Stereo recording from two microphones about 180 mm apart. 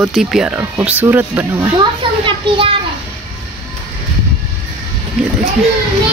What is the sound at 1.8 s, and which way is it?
Speech, 30° right (ahead or behind).